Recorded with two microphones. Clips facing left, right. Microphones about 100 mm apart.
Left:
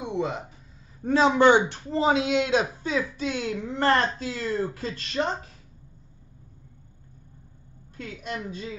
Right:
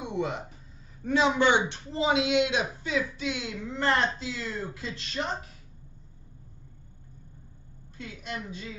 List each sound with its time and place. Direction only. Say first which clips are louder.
0.0 s a sound: left 2 dB; 30° left (ahead or behind)
1.0 s speech: left 5 dB; 40° left (ahead or behind)
8.0 s a woman's voice: left 4 dB; 45° left (ahead or behind)